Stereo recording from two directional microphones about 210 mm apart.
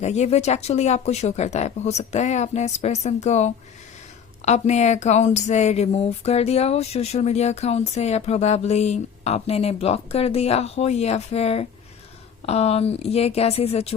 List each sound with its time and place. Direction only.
0.0 s speech: 30° left (ahead or behind)